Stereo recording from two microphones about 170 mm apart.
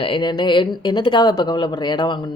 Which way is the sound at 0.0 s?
30° left (ahead or behind).